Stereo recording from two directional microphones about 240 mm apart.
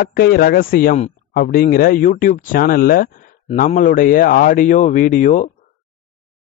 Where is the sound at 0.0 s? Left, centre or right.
Left.